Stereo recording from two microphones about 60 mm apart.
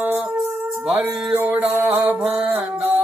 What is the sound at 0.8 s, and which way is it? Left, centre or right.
Music, right.